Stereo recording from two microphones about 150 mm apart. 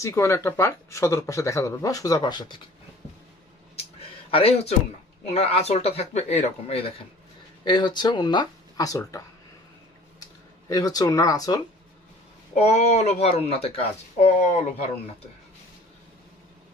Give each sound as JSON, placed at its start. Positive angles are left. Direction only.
{"t": 0.0, "sound": "speech", "side_deg": 20}
{"t": 4.3, "sound": "speech", "side_deg": 40}
{"t": 7.6, "sound": "speech", "side_deg": 30}
{"t": 10.7, "sound": "speech", "side_deg": 25}
{"t": 12.5, "sound": "speech", "side_deg": 45}